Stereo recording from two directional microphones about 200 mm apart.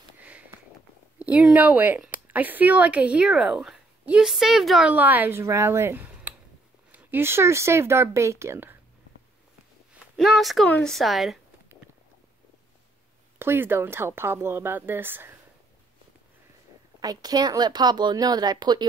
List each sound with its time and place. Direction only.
0.2 s sniff: 5° right (ahead or behind)
1.2 s speech: 5° right (ahead or behind)
10.1 s a woman's voice: centre (ahead or behind)
13.4 s speech: 10° right (ahead or behind)
17.0 s speech: 20° right (ahead or behind)